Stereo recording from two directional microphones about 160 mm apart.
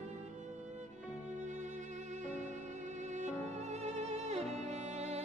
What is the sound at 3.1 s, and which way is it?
Music, 45° right (ahead or behind).